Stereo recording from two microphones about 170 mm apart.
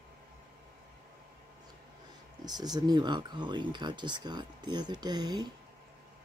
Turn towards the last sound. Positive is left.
turn(degrees=-25)  # may be behind; listen again after turning